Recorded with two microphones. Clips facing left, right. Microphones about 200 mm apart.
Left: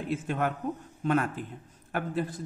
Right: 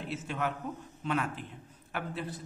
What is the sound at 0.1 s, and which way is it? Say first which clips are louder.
A man's voice: left 5 dB; 50° left (ahead or behind).